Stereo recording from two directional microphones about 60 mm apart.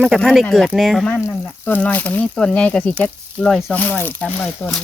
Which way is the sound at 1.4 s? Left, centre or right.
Left.